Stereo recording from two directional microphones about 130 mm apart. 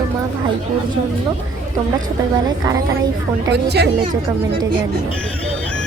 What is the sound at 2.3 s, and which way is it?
Speech, 25° right (ahead or behind).